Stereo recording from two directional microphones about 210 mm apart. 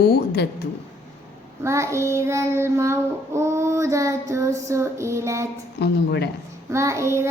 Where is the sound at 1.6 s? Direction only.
15° right (ahead or behind).